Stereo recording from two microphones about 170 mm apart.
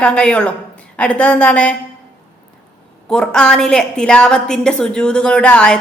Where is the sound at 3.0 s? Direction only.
5° left (ahead or behind).